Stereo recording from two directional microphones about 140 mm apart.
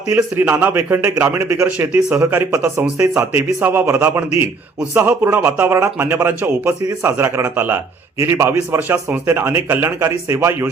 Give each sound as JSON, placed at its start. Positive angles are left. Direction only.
{"t": 0.1, "sound": "speech", "side_deg": -15}